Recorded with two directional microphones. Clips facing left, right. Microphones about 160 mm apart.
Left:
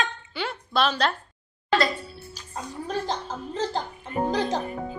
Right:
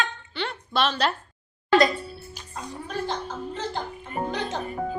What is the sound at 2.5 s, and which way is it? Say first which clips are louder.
Speech: left 2 dB; 35° left (ahead or behind).